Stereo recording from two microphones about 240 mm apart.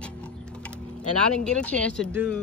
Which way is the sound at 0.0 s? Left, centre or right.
Centre.